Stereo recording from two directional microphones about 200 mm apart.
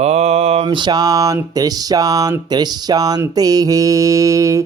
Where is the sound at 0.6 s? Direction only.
20° right (ahead or behind).